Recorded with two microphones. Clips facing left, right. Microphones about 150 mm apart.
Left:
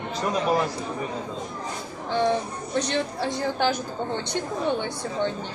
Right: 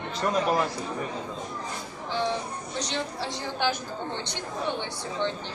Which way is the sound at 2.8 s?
55° left (ahead or behind).